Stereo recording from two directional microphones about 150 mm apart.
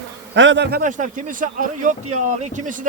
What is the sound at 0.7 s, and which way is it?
A man's voice, 60° right (ahead or behind).